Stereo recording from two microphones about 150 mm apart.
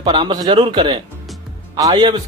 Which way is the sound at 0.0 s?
30° right (ahead or behind).